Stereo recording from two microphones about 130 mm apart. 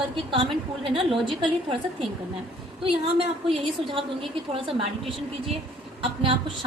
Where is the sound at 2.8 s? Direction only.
45° right (ahead or behind).